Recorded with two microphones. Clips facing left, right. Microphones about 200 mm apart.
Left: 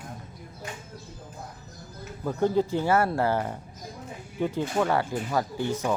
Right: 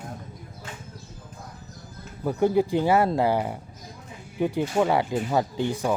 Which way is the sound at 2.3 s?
15° right (ahead or behind).